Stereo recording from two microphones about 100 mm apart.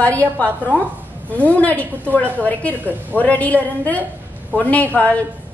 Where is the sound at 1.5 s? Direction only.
15° left (ahead or behind).